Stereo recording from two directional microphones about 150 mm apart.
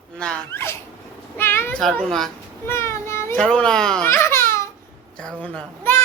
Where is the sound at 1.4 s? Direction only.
15° left (ahead or behind).